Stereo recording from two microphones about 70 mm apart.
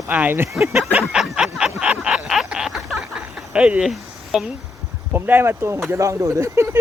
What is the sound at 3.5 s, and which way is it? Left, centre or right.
Speech, centre.